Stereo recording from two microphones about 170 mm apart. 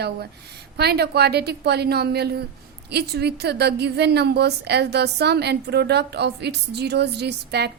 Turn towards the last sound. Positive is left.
turn(degrees=-75)  # may be behind; listen again after turning